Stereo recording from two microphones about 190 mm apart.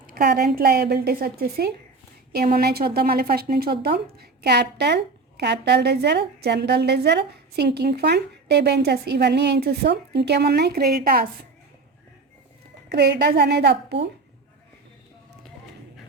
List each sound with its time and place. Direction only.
0.1 s a woman's voice: 50° right (ahead or behind)
12.9 s a woman's voice: 60° right (ahead or behind)